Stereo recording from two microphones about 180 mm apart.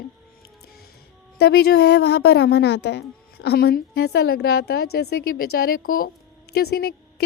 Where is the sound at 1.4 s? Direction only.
65° left (ahead or behind).